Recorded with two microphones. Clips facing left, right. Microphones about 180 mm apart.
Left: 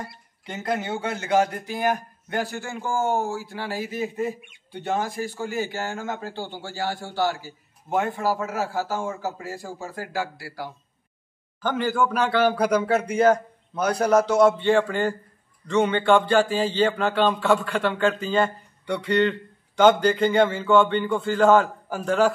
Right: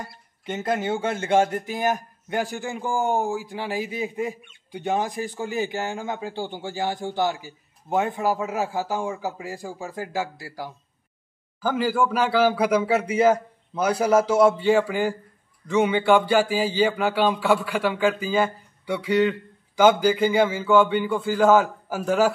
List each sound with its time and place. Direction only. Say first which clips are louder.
0.5 s speech: right 3 dB; 20° right (ahead or behind); by 22.3 s 5° right (ahead or behind)